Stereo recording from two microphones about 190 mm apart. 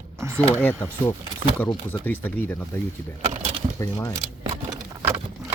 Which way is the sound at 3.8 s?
15° left (ahead or behind).